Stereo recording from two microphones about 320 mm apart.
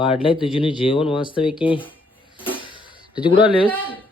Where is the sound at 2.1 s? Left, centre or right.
Centre.